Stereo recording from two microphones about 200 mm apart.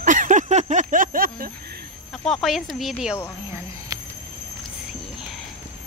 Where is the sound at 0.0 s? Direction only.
40° right (ahead or behind).